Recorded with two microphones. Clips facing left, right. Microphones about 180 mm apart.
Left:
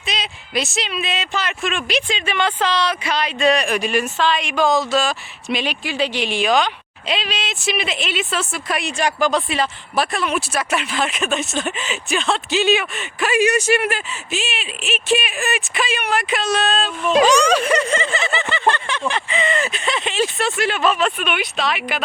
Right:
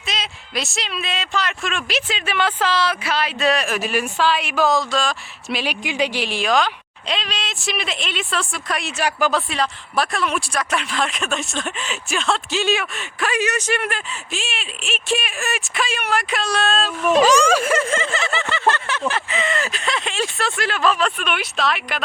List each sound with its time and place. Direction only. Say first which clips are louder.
0.0 s speech: left 2 dB; centre (ahead or behind)
5.8 s speech: right 3 dB; 15° right (ahead or behind)
6.1 s speech: left 4 dB; centre (ahead or behind)
9.0 s speech: left 1 dB; 10° right (ahead or behind)
9.5 s speech: left 2 dB; centre (ahead or behind)